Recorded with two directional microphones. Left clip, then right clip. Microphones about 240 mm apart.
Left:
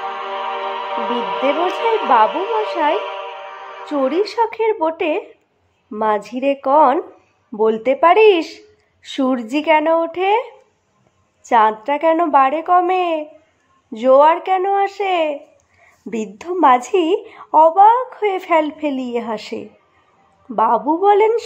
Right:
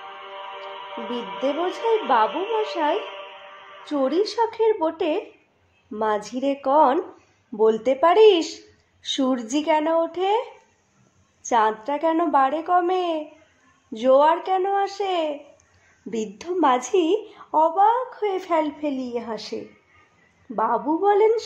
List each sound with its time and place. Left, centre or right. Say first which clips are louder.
0.0 s music: left 13 dB; left
2.2 s speech: left 6 dB; left
2.8 s music: left 6 dB; left
4.0 s a woman's voice: left 4 dB; centre